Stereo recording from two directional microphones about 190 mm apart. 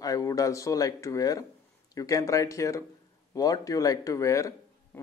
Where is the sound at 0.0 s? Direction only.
20° left (ahead or behind).